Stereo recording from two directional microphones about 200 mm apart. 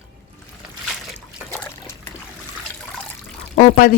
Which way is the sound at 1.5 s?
10° left (ahead or behind).